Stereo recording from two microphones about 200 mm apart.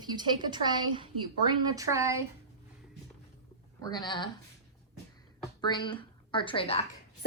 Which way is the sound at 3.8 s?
20° left (ahead or behind).